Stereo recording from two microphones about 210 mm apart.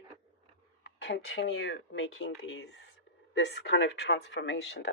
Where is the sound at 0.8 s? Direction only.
60° left (ahead or behind).